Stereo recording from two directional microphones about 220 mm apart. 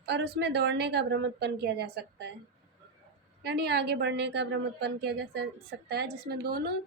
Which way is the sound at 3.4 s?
50° right (ahead or behind).